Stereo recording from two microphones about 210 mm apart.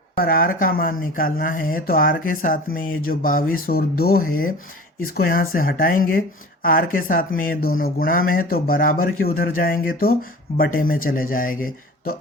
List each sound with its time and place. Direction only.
0.2 s speech: 45° left (ahead or behind)